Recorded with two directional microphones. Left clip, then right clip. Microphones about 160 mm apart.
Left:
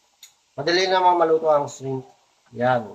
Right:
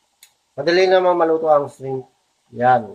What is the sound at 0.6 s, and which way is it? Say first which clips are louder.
A man's voice: right 3 dB; 55° right (ahead or behind).